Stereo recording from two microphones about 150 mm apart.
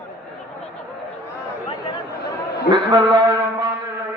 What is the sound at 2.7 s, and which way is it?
Brass instrument, 30° right (ahead or behind).